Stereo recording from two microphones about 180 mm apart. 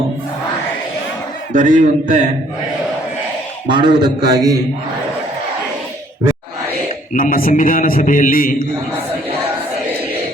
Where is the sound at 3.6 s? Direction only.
25° right (ahead or behind).